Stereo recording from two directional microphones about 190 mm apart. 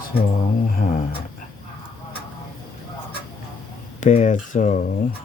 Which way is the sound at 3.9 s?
40° left (ahead or behind).